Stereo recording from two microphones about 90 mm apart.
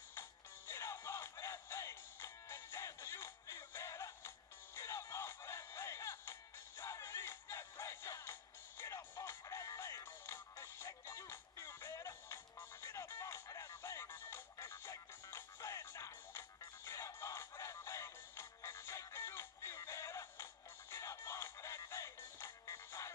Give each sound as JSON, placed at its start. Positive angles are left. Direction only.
{"t": 0.1, "sound": "music", "side_deg": 30}